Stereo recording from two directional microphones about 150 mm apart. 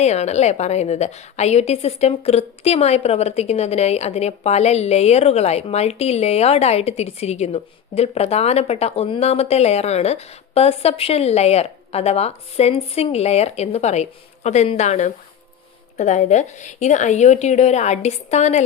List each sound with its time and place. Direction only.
0.0 s a woman's voice: 45° left (ahead or behind)